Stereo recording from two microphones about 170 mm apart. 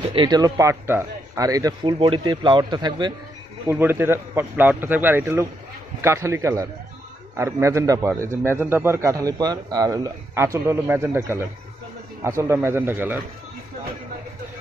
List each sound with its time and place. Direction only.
0.1 s speech: 25° right (ahead or behind)
3.6 s a man's voice: 15° right (ahead or behind)